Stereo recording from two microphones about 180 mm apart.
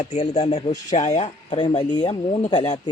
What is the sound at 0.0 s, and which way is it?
Speech, 40° left (ahead or behind).